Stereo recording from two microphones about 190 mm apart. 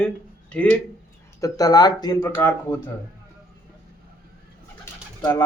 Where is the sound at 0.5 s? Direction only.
5° left (ahead or behind).